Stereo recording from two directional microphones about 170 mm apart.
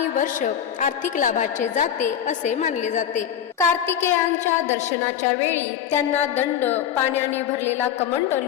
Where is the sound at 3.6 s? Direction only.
15° left (ahead or behind).